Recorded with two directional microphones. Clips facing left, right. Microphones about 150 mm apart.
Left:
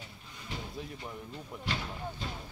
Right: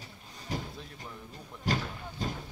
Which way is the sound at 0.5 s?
40° right (ahead or behind).